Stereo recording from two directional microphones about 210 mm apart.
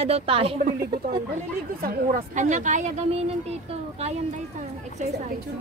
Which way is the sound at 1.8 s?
40° right (ahead or behind).